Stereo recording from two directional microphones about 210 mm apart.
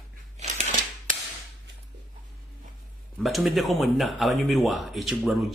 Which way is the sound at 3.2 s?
Centre (ahead or behind).